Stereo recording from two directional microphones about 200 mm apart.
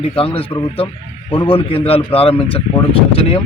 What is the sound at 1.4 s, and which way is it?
A man's voice, 30° left (ahead or behind).